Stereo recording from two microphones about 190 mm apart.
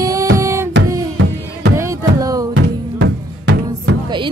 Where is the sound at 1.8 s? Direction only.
15° right (ahead or behind).